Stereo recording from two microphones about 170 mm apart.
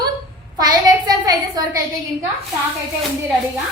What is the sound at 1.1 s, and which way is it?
Speech, 20° right (ahead or behind).